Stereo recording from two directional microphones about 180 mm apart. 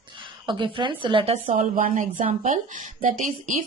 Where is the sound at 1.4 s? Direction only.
45° right (ahead or behind).